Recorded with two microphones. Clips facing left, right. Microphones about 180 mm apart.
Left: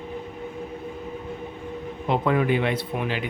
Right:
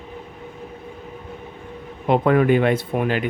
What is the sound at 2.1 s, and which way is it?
Speech, 55° right (ahead or behind).